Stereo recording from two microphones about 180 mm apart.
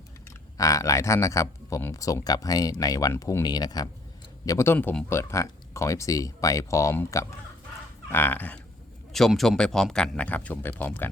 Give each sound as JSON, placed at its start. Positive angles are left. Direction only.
{"t": 0.5, "sound": "speech", "side_deg": 20}